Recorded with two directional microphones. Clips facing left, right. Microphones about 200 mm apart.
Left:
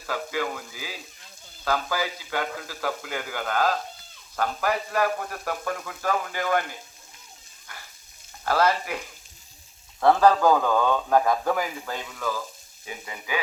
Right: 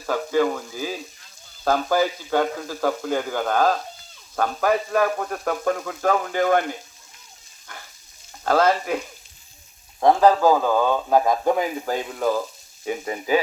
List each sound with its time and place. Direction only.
0.0 s speech: 50° right (ahead or behind)
8.4 s speech: 50° right (ahead or behind)
10.0 s speech: 15° right (ahead or behind)
11.9 s speech: 40° right (ahead or behind)